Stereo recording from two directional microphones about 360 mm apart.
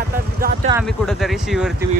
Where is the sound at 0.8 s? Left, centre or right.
Centre.